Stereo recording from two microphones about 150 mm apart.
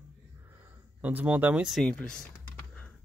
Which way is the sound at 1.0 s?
10° right (ahead or behind).